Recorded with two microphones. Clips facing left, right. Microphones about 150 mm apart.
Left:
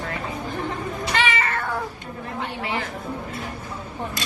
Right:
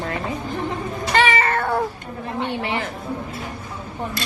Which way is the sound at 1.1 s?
45° right (ahead or behind).